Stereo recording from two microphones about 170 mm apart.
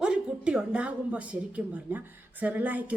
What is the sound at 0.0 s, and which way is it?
A woman's voice, 5° right (ahead or behind).